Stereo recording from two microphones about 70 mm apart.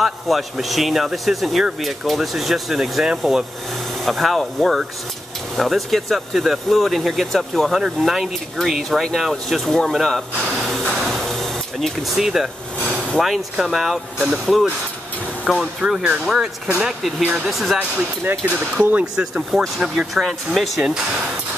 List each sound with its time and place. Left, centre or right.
0.0 s speech: centre
11.0 s vehicle: centre
12.8 s a sound: centre
13.2 s speech: centre
15.8 s speech: centre
18.4 s speech: right
19.1 s speech: centre